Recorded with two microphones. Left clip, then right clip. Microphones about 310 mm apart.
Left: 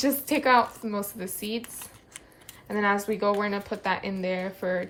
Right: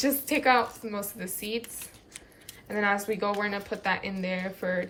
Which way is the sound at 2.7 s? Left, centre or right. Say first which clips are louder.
Left 1 dB; centre.